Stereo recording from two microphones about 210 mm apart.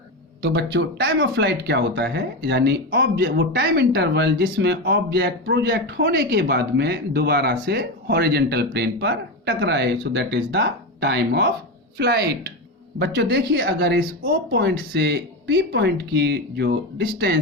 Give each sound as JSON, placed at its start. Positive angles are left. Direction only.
{"t": 0.4, "sound": "speech", "side_deg": -55}